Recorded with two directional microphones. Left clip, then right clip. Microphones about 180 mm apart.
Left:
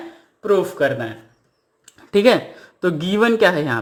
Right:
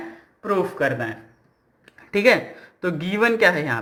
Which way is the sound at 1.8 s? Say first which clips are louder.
Left 3 dB; 45° left (ahead or behind).